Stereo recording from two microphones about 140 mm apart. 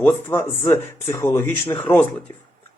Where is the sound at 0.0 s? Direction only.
15° left (ahead or behind).